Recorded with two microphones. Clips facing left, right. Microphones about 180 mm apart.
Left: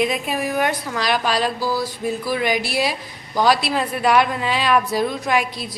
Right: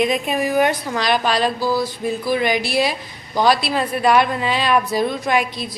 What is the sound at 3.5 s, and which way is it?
Speech, 10° left (ahead or behind).